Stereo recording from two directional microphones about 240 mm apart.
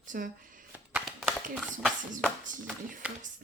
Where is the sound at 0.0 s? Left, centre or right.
Right.